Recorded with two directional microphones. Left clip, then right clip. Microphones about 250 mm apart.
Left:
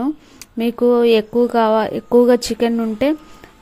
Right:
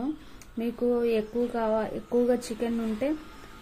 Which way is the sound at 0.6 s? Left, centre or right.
Left.